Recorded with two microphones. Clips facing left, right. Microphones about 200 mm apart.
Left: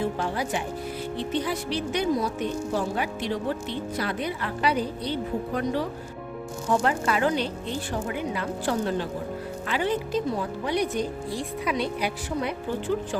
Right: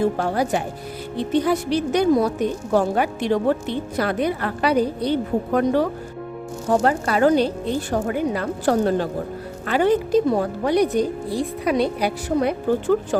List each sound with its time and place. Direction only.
0.0 s a woman's voice: 45° right (ahead or behind)
6.7 s a woman's voice: 40° right (ahead or behind)